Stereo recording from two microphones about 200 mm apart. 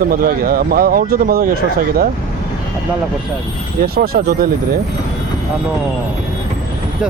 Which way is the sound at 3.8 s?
50° right (ahead or behind).